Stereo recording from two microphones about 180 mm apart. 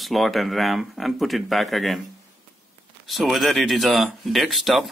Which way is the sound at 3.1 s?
Centre (ahead or behind).